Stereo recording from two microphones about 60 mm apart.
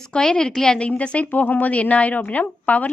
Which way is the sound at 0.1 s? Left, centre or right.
Centre.